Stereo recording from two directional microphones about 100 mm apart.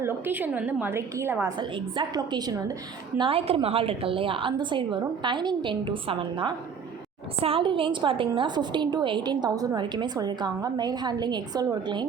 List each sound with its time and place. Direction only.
0.0 s a woman's voice: 20° right (ahead or behind)
1.5 s a woman's voice: 55° right (ahead or behind)
2.1 s a woman's voice: 40° right (ahead or behind)
3.2 s a woman's voice: 65° right (ahead or behind); by 12.0 s 45° right (ahead or behind)